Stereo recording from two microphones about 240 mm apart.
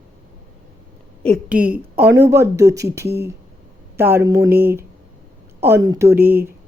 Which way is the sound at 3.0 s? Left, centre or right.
Right.